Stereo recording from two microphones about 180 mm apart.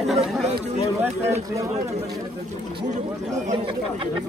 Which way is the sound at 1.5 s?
20° right (ahead or behind).